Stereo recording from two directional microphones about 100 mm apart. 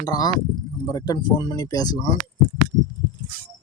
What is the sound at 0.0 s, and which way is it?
Speech, 40° left (ahead or behind).